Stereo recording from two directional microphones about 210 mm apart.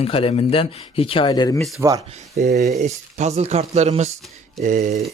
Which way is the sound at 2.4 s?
40° right (ahead or behind).